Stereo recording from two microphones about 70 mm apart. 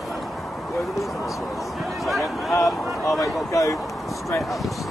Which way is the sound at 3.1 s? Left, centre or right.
Left.